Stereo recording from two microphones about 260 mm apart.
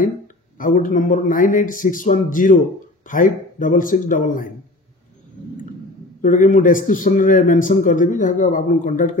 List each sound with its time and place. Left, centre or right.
0.6 s a man's voice: left
6.2 s a man's voice: left